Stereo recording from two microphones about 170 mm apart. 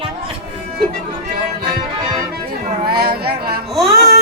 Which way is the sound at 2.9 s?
70° right (ahead or behind).